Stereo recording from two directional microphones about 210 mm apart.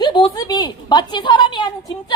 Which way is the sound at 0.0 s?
20° left (ahead or behind).